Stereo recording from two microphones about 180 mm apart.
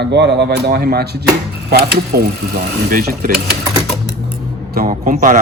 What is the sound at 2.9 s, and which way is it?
Speech, 55° right (ahead or behind).